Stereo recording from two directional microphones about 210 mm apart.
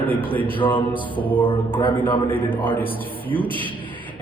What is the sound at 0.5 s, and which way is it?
Speech, 25° left (ahead or behind).